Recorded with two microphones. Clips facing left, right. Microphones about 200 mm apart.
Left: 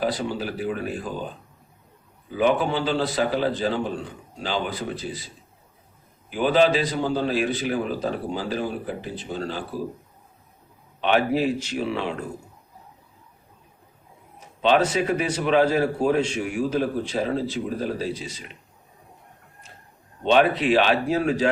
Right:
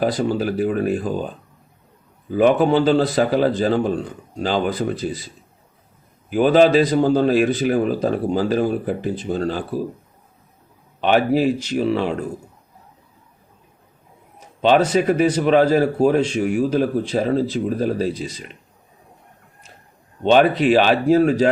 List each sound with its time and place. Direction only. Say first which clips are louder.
0.0 s a man's voice: right 6 dB; 45° right (ahead or behind)
2.3 s a man's voice: right 7 dB; 45° right (ahead or behind)
6.3 s a man's voice: right 6 dB; 45° right (ahead or behind)
11.0 s a man's voice: right 4 dB; 40° right (ahead or behind)
14.6 s a man's voice: right 4 dB; 40° right (ahead or behind)
20.2 s a man's voice: right 5 dB; 40° right (ahead or behind)